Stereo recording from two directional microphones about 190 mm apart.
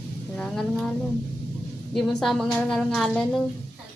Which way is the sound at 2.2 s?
Centre (ahead or behind).